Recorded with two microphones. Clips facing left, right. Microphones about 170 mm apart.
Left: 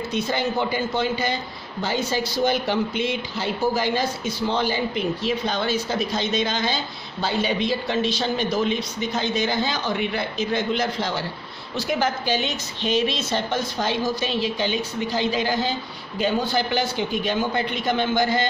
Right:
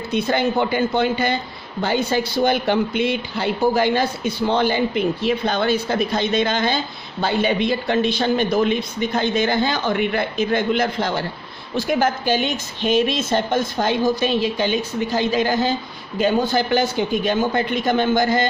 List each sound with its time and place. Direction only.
0.1 s a man's voice: 60° right (ahead or behind)